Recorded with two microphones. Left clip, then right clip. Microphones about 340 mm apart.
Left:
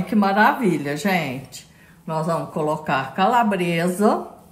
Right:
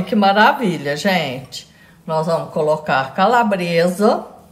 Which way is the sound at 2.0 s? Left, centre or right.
Centre.